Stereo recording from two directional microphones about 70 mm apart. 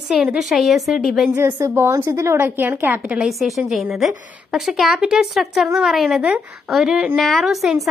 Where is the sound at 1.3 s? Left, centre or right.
Right.